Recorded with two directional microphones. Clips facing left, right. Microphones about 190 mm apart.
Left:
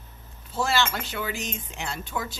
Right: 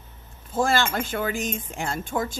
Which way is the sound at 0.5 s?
50° right (ahead or behind).